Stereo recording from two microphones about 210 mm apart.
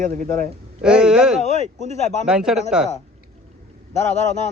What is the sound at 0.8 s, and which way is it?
Speech, 5° right (ahead or behind).